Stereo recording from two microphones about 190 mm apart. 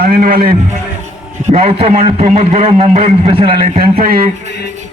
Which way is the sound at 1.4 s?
35° right (ahead or behind).